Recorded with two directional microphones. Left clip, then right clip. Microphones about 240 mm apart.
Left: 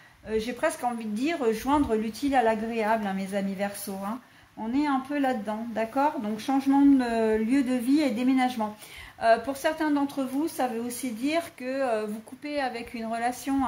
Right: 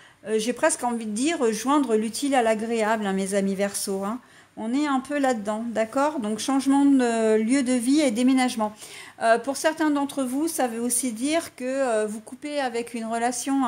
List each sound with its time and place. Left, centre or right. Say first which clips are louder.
0.3 s a woman's voice: right 5 dB; right